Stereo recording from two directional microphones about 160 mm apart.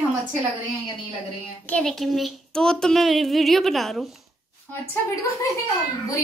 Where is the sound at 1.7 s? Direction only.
Centre (ahead or behind).